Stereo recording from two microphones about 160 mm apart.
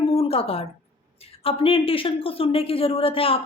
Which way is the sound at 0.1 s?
35° left (ahead or behind).